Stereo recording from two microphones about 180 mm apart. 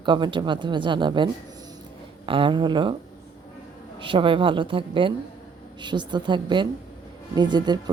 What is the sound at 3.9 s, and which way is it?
Speech, 30° right (ahead or behind).